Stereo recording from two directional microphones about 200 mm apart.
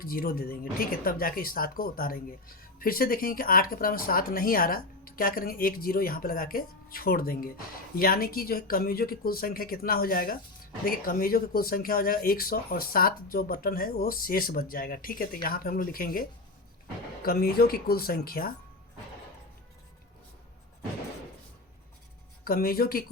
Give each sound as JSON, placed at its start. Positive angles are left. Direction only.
{"t": 0.0, "sound": "speech", "side_deg": 45}
{"t": 17.2, "sound": "speech", "side_deg": 50}
{"t": 22.4, "sound": "speech", "side_deg": 45}